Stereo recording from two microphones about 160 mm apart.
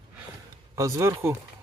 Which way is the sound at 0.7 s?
20° right (ahead or behind).